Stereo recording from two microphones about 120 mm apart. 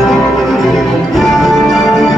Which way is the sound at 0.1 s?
Centre (ahead or behind).